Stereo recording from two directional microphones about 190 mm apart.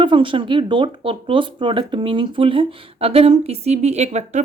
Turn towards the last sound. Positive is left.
turn(degrees=-35)  # may be behind; listen again after turning